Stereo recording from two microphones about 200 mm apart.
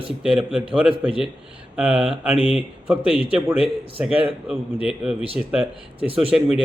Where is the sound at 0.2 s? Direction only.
5° right (ahead or behind).